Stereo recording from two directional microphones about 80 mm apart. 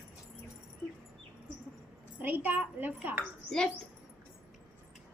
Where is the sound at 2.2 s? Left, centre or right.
Right.